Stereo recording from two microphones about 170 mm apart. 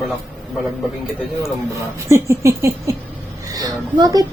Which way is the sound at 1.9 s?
15° right (ahead or behind).